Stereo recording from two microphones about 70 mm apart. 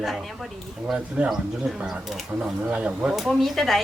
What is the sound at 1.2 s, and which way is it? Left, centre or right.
Speech, centre.